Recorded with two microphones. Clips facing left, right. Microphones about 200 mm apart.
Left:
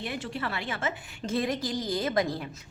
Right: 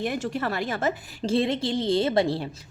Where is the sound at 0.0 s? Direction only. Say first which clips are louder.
Right 6 dB; 45° right (ahead or behind).